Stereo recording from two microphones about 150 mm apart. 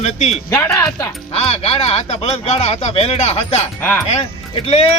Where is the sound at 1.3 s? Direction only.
40° left (ahead or behind).